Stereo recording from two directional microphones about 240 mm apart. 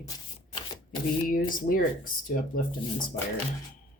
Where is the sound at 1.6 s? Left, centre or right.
Left.